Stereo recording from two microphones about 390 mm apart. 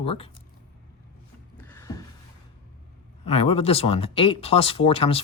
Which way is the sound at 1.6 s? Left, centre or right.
Centre.